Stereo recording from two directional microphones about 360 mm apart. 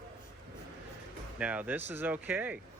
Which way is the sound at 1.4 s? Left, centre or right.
Centre.